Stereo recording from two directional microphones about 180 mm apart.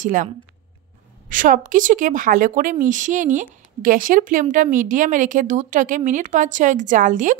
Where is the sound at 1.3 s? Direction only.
45° right (ahead or behind).